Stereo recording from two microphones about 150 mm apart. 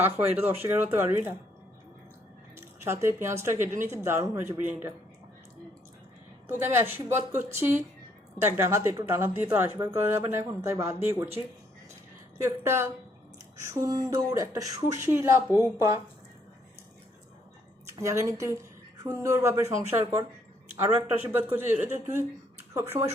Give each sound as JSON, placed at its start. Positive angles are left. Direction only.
{"t": 0.0, "sound": "speech", "side_deg": -15}
{"t": 2.6, "sound": "speech", "side_deg": -15}
{"t": 6.5, "sound": "speech", "side_deg": -15}
{"t": 12.4, "sound": "a woman's voice", "side_deg": -15}
{"t": 17.8, "sound": "a woman's voice", "side_deg": -20}